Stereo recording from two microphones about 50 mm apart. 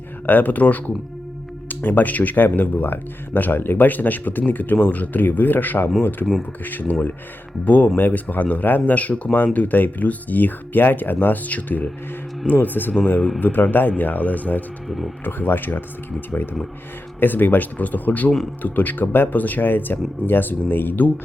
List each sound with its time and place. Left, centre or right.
0.3 s speech: left
1.8 s speech: left
14.8 s speech: centre
15.2 s speech: left